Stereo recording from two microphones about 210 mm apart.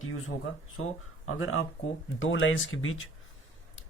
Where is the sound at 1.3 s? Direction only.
75° left (ahead or behind).